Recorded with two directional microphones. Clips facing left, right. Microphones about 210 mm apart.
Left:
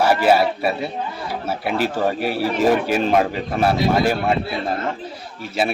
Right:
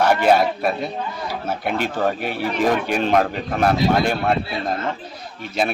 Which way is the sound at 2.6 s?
5° left (ahead or behind).